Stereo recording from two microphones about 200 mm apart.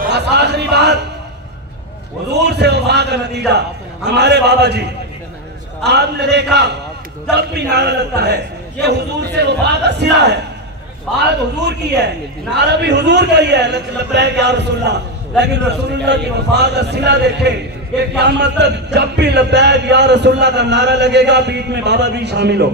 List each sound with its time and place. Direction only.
0.0 s a man's voice: 60° right (ahead or behind)
2.3 s a man's voice: 60° right (ahead or behind)